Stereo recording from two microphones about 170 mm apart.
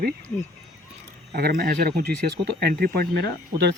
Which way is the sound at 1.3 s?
65° right (ahead or behind).